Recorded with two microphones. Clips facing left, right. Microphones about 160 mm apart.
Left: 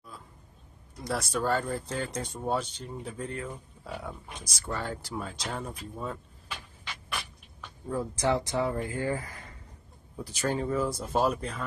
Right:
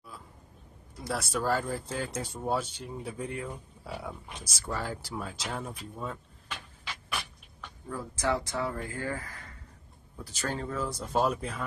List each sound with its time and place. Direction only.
1.0 s speech: 5° right (ahead or behind)
7.9 s speech: 20° left (ahead or behind); by 11.6 s centre (ahead or behind)